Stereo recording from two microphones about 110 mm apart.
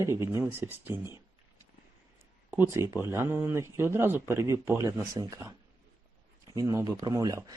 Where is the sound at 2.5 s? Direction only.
25° right (ahead or behind).